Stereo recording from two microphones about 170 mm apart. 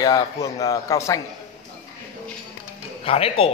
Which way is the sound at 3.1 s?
35° left (ahead or behind).